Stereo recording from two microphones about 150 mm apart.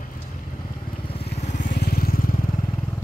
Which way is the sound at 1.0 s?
40° left (ahead or behind).